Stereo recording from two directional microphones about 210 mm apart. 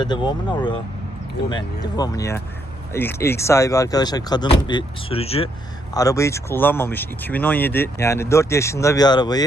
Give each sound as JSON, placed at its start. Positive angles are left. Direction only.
{"t": 0.0, "sound": "speech", "side_deg": 20}
{"t": 5.9, "sound": "speech", "side_deg": 15}